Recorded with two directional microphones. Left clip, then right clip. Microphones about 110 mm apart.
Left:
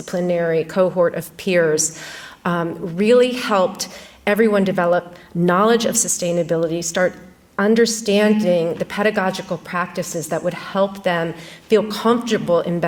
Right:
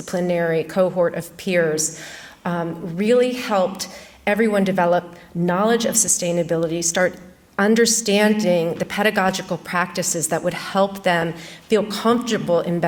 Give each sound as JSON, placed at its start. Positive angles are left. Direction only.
{"t": 0.1, "sound": "a woman's voice", "side_deg": 30}
{"t": 2.4, "sound": "speech", "side_deg": 75}
{"t": 4.3, "sound": "a woman's voice", "side_deg": 45}
{"t": 5.5, "sound": "a woman's voice", "side_deg": 60}
{"t": 11.7, "sound": "a woman's voice", "side_deg": 35}